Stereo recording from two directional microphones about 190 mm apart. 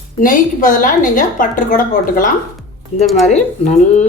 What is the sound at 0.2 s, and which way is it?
A woman's voice, 45° left (ahead or behind).